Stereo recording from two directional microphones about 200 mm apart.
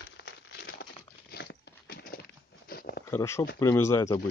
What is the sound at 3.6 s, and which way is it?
Speech, 15° left (ahead or behind).